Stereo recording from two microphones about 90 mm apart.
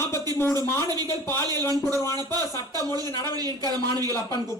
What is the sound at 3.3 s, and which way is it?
Speech, 45° right (ahead or behind).